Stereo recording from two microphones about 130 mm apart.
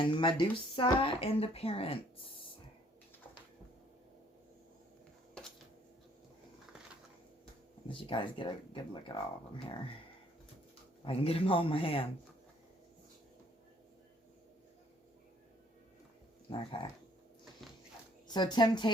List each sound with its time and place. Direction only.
0.0 s speech: 40° left (ahead or behind)
1.0 s speech: 50° left (ahead or behind)
7.9 s speech: 40° left (ahead or behind)
11.0 s speech: 45° left (ahead or behind)
16.5 s speech: 40° left (ahead or behind)
18.3 s speech: 35° left (ahead or behind)